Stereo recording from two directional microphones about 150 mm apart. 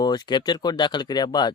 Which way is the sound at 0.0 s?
30° left (ahead or behind).